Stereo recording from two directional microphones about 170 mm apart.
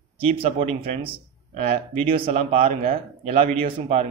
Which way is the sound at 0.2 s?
35° right (ahead or behind).